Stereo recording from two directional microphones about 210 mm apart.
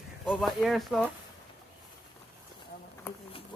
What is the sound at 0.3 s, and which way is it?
Speech, centre (ahead or behind).